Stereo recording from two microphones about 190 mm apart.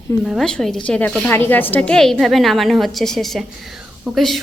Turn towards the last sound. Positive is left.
turn(degrees=0)  # may be behind; listen again after turning